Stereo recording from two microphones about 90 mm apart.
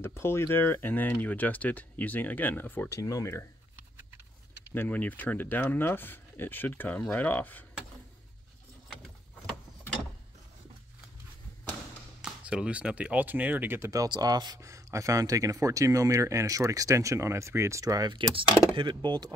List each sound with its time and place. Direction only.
0.0 s speech: 30° left (ahead or behind)
3.0 s speech: 40° left (ahead or behind)
4.7 s speech: 20° left (ahead or behind)
12.2 s speech: 10° right (ahead or behind); by 14.0 s 30° right (ahead or behind)
14.0 s speech: 50° right (ahead or behind)
14.6 s speech: 35° right (ahead or behind)
18.1 s speech: 65° right (ahead or behind)
19.0 s speech: 50° right (ahead or behind)